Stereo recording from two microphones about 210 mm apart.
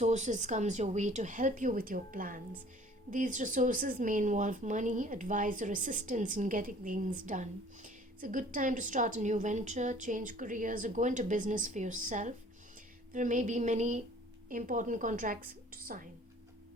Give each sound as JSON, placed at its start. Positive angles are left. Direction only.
{"t": 0.0, "sound": "a woman's voice", "side_deg": -35}